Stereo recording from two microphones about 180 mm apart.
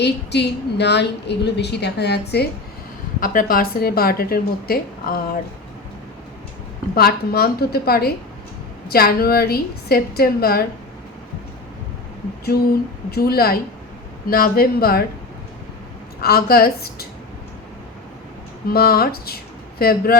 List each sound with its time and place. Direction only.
0.0 s a woman's voice: 70° left (ahead or behind)
3.2 s speech: 50° left (ahead or behind)
6.9 s speech: 60° left (ahead or behind)
13.1 s speech: 60° left (ahead or behind)
16.2 s speech: 55° left (ahead or behind)
18.7 s speech: 60° left (ahead or behind)